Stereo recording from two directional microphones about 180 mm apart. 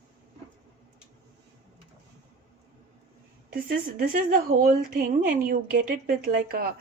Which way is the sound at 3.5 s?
50° right (ahead or behind).